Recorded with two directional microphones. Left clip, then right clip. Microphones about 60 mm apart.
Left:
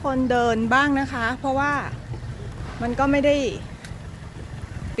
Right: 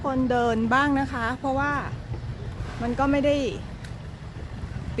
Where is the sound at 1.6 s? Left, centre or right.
Centre.